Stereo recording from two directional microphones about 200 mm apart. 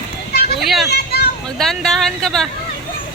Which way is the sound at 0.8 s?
55° left (ahead or behind).